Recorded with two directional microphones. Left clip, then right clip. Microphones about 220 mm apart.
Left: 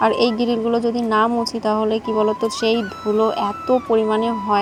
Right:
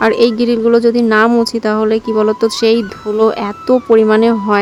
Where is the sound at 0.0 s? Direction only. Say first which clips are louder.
Right 6 dB; 15° right (ahead or behind).